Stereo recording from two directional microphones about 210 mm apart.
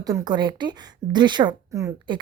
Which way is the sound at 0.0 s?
20° right (ahead or behind).